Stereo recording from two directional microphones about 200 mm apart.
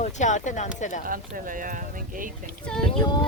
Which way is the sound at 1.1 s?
45° right (ahead or behind).